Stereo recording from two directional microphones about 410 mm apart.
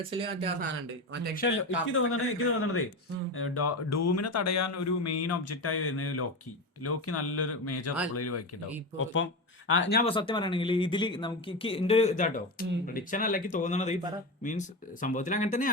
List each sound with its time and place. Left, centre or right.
0.1 s speech: centre
1.4 s speech: left